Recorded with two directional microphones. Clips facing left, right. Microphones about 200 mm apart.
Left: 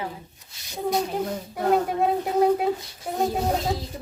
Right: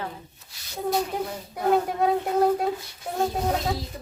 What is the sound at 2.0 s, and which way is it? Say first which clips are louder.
Speech: even; 5° left (ahead or behind).